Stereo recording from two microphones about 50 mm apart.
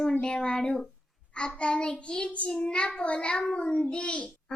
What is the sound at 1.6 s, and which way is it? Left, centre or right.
Child singing, centre.